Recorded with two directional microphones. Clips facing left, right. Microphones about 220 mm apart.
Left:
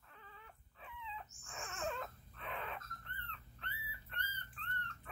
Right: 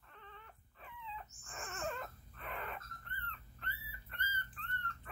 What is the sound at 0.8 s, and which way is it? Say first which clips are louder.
Dog: right 1 dB; centre (ahead or behind).